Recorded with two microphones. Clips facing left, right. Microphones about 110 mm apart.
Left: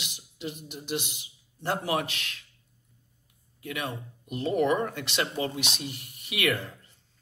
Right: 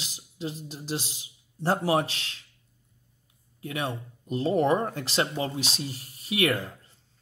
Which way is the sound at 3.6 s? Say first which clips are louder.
Right 2 dB; 30° right (ahead or behind).